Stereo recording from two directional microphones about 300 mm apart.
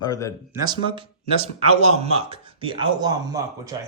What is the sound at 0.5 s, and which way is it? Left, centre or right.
Speech, centre.